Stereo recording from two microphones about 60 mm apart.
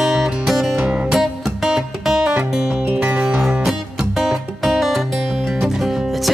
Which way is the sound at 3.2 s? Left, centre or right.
Centre.